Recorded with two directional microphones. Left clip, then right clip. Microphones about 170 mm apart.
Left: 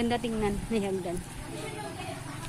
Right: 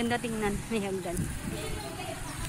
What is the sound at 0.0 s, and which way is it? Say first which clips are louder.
Speech: left 1 dB; 15° left (ahead or behind).